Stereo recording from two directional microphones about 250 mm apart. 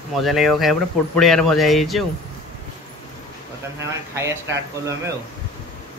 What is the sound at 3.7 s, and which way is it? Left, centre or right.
Speech, centre.